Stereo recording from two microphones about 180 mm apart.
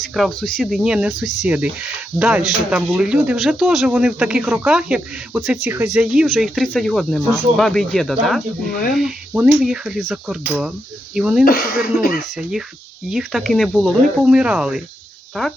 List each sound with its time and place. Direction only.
0.1 s speech: centre (ahead or behind)
1.5 s a sound: 10° right (ahead or behind)
2.1 s speech: 5° right (ahead or behind)
10.4 s a sound: 10° right (ahead or behind)
11.1 s speech: 5° right (ahead or behind)
11.4 s speech: 55° left (ahead or behind)
12.4 s speech: 5° right (ahead or behind)